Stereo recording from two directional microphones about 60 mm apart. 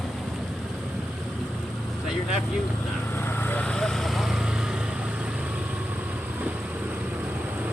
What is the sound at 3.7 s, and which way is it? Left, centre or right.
Vehicle, centre.